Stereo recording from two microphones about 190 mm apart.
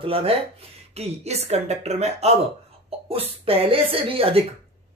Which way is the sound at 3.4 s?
30° right (ahead or behind).